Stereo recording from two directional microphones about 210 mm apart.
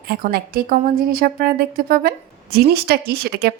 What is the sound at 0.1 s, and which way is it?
A woman's voice, 45° right (ahead or behind).